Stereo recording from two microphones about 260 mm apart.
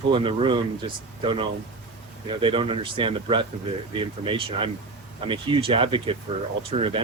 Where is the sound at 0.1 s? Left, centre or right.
Centre.